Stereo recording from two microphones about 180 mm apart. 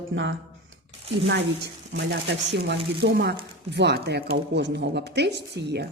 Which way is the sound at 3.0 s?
70° right (ahead or behind).